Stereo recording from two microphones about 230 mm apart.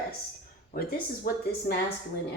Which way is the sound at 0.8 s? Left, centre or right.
Left.